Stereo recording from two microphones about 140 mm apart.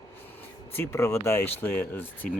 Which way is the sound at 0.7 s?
20° left (ahead or behind).